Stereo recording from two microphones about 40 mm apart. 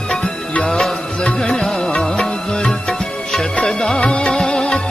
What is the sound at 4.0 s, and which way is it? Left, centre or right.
Music, left.